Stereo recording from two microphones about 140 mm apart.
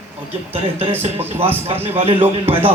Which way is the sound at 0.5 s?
40° right (ahead or behind).